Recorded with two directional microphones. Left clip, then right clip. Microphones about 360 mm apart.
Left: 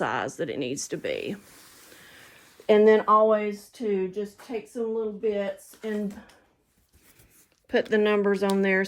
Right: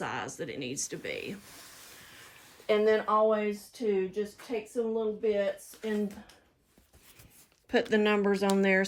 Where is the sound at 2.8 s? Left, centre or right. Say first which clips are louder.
Left 7 dB; centre.